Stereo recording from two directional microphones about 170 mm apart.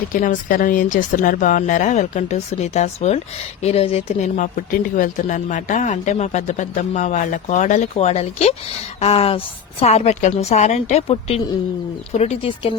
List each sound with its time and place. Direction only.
0.1 s a woman's voice: 55° left (ahead or behind); by 12.7 s 35° left (ahead or behind)